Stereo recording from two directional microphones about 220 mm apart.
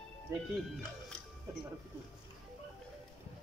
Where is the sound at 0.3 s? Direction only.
10° right (ahead or behind).